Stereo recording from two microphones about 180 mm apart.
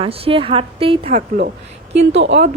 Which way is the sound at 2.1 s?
80° right.